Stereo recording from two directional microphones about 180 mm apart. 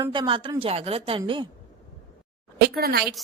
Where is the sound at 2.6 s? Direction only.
60° right (ahead or behind).